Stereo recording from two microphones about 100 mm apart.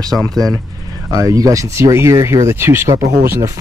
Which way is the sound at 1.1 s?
35° right (ahead or behind).